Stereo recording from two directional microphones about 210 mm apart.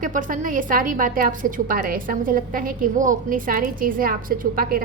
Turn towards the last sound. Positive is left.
turn(degrees=-45)  # may be behind; listen again after turning